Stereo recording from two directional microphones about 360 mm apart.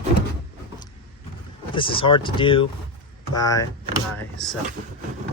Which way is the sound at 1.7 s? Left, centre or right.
Centre.